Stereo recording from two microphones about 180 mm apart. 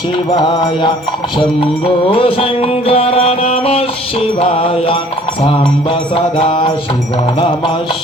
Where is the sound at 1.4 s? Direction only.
30° left (ahead or behind).